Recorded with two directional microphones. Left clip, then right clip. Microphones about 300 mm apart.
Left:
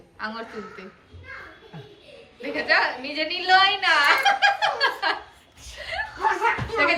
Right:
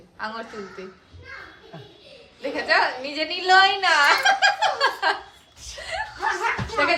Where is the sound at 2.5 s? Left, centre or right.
Centre.